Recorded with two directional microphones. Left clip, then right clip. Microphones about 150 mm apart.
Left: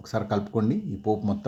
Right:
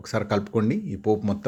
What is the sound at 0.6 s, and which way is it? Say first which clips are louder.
Speech: right 2 dB; 15° right (ahead or behind).